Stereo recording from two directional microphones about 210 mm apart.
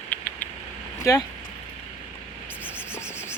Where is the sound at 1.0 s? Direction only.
15° left (ahead or behind).